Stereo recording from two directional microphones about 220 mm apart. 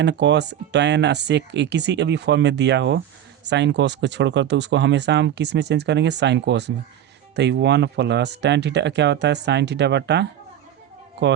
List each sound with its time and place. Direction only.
0.0 s speech: 50° right (ahead or behind)